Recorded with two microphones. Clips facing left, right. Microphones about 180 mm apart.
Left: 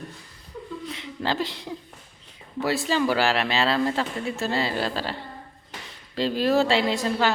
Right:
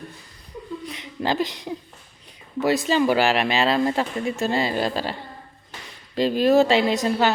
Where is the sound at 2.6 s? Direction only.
20° right (ahead or behind).